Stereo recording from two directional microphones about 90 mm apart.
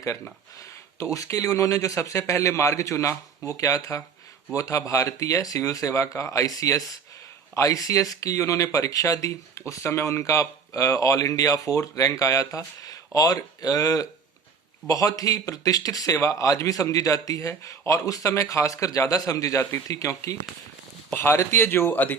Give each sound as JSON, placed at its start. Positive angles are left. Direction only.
{"t": 0.9, "sound": "speech", "side_deg": 40}
{"t": 21.1, "sound": "speech", "side_deg": 20}